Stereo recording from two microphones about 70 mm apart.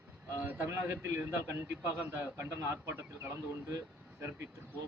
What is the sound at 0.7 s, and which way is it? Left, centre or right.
A man's voice, right.